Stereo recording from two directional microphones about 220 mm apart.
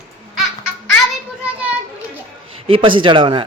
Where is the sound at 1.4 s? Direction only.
5° right (ahead or behind).